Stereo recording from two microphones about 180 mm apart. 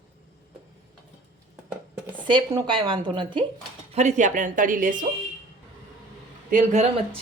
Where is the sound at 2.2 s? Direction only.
25° right (ahead or behind).